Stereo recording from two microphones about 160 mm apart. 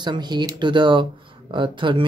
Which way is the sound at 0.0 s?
25° right (ahead or behind).